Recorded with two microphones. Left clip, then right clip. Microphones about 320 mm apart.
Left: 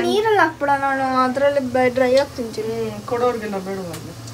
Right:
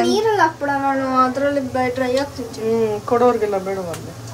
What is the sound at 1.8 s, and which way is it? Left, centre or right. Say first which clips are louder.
Speech: left 5 dB; centre.